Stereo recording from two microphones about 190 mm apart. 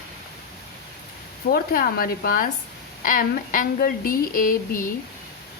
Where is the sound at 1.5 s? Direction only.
50° left (ahead or behind).